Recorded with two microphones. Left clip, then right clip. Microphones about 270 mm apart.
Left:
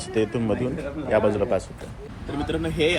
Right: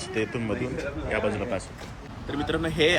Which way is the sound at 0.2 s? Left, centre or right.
Centre.